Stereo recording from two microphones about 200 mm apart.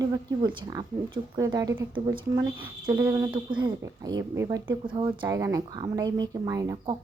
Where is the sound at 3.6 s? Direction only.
20° right (ahead or behind).